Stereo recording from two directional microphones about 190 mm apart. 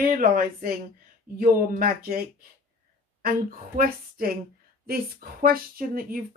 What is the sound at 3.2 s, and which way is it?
Speech, 50° right (ahead or behind).